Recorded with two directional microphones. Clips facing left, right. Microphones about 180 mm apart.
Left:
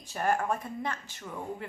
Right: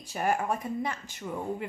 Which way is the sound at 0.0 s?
10° right (ahead or behind).